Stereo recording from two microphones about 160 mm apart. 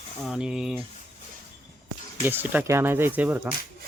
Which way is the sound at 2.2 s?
10° right (ahead or behind).